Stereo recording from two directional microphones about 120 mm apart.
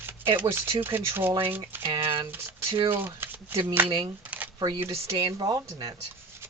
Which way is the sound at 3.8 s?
45° right (ahead or behind).